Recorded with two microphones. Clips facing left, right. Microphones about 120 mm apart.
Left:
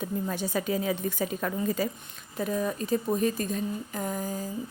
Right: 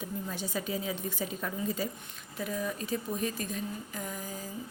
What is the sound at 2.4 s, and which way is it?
A woman's voice, 40° left (ahead or behind).